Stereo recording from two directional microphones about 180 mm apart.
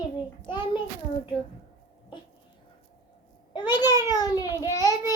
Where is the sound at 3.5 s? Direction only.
25° left (ahead or behind).